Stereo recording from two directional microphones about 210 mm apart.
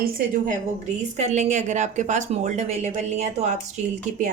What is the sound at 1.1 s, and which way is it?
A woman's voice, 35° right (ahead or behind).